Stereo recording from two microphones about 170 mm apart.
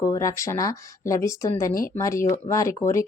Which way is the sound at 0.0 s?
20° left (ahead or behind).